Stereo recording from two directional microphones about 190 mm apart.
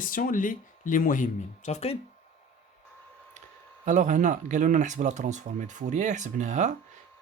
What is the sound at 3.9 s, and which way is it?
Speech, 40° right (ahead or behind).